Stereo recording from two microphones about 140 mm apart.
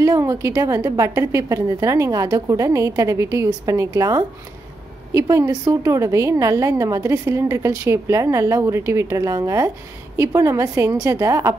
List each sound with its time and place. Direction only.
0.0 s a woman's voice: 25° right (ahead or behind)